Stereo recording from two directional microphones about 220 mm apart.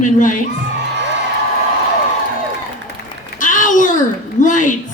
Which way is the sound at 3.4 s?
35° left (ahead or behind).